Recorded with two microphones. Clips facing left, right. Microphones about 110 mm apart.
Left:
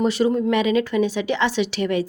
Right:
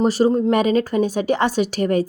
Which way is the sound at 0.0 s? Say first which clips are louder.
Right 3 dB; 40° right (ahead or behind).